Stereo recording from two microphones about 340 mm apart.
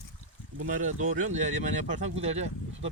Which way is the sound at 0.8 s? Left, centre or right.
Right.